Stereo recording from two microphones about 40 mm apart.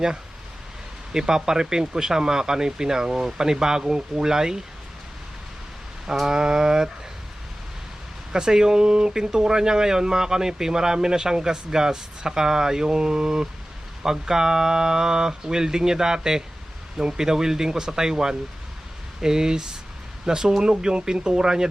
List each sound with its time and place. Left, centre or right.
1.1 s speech: centre
6.1 s speech: centre
8.3 s speech: centre